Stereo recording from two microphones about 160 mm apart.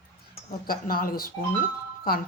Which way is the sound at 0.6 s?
65° left (ahead or behind).